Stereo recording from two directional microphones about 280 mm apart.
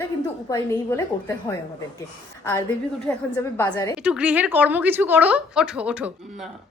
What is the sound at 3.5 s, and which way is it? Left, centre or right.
Speech, centre.